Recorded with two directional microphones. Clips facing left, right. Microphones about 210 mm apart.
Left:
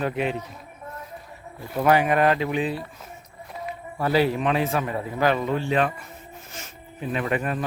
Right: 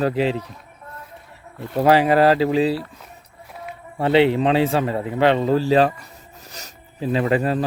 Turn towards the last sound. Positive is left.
turn(degrees=-30)  # may be behind; listen again after turning